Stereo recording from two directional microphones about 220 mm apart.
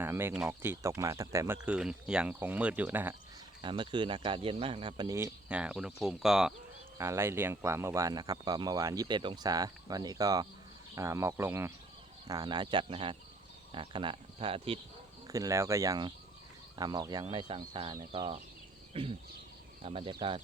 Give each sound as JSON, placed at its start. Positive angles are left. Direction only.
{"t": 0.0, "sound": "speech", "side_deg": -10}
{"t": 3.6, "sound": "speech", "side_deg": -20}
{"t": 15.3, "sound": "speech", "side_deg": -15}